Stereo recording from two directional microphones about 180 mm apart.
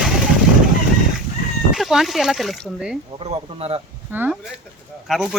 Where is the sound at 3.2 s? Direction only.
35° right (ahead or behind).